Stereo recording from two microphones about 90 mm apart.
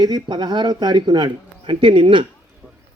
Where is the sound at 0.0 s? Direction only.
50° right (ahead or behind); by 2.2 s 65° right (ahead or behind).